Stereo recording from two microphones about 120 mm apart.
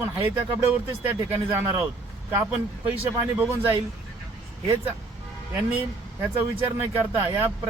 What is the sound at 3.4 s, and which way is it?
Speech, 20° right (ahead or behind).